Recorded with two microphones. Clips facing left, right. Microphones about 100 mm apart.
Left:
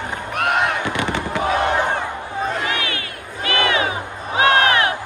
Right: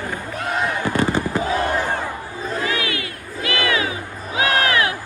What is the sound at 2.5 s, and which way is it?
Crowd, 25° left (ahead or behind).